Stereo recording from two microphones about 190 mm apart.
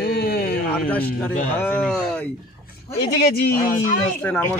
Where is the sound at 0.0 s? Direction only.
55° left (ahead or behind).